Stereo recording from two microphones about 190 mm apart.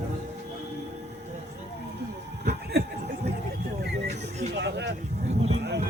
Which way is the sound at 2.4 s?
60° right (ahead or behind).